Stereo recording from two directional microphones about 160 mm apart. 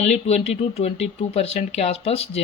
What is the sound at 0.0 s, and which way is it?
Speech, 40° left (ahead or behind).